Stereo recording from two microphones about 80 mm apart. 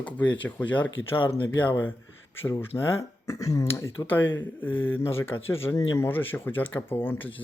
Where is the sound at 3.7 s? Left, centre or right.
Left.